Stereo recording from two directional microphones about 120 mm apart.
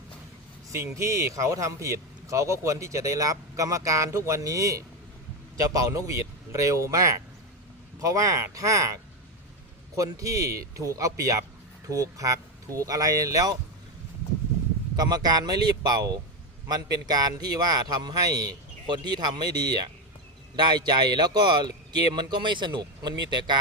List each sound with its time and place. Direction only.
0.9 s speech: 25° right (ahead or behind)
14.9 s speech: 35° right (ahead or behind)